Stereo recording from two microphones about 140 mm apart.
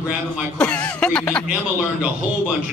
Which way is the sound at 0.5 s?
10° left (ahead or behind).